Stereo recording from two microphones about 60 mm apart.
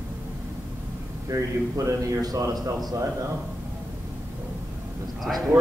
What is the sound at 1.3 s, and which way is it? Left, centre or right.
A man's voice, right.